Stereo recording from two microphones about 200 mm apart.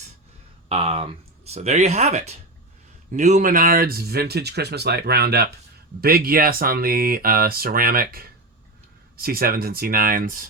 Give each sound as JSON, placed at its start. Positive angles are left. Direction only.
{"t": 0.7, "sound": "speech", "side_deg": -30}